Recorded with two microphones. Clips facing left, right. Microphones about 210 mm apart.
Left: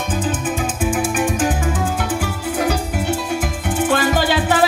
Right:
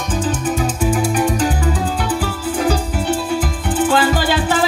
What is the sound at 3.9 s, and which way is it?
Music, 45° left (ahead or behind).